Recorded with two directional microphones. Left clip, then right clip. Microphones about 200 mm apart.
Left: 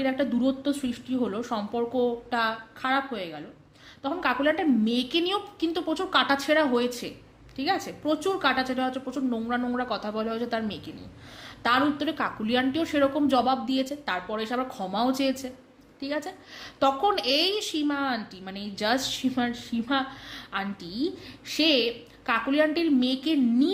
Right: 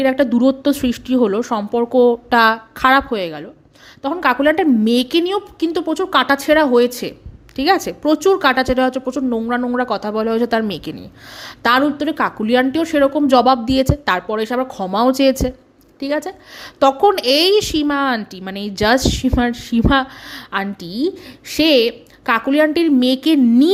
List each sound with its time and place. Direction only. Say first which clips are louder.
0.0 s a woman's voice: right 12 dB; 45° right (ahead or behind)